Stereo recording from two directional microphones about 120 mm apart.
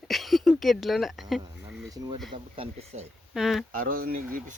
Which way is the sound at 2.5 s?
60° right (ahead or behind).